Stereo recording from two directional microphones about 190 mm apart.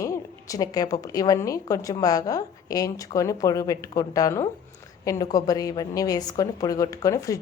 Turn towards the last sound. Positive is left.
turn(degrees=15)  # may be behind; listen again after turning